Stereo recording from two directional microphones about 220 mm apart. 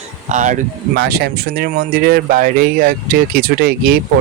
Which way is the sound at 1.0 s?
45° right (ahead or behind).